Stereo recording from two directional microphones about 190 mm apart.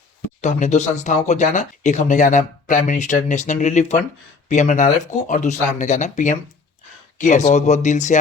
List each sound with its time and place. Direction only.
0.4 s speech: 35° left (ahead or behind)